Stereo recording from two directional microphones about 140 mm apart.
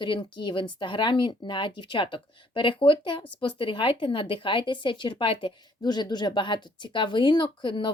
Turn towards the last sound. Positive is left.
turn(degrees=35)  # may be behind; listen again after turning